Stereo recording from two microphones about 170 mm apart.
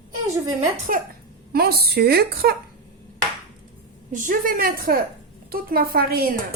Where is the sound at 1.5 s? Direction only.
65° right (ahead or behind).